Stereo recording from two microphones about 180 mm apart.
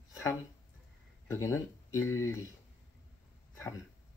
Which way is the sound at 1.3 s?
15° left (ahead or behind).